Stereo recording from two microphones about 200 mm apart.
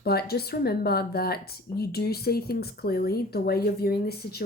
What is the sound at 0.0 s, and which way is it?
Speech, 50° left (ahead or behind).